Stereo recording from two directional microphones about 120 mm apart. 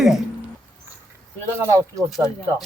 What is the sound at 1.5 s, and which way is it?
Speech, 25° right (ahead or behind).